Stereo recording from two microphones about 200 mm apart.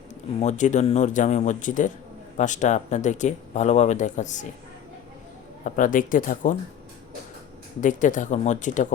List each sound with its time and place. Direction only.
0.3 s speech: 35° left (ahead or behind)
5.6 s speech: 40° left (ahead or behind)
7.8 s speech: 40° left (ahead or behind)